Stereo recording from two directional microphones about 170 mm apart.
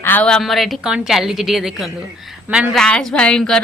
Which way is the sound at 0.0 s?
10° left (ahead or behind).